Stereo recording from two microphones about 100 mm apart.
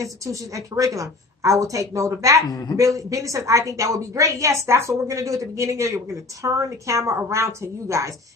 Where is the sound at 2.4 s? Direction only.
40° left (ahead or behind).